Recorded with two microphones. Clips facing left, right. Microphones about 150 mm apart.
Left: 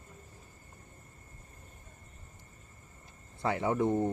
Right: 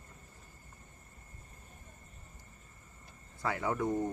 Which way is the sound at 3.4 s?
25° left (ahead or behind).